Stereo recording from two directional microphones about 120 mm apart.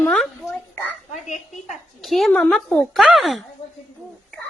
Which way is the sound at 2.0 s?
Centre (ahead or behind).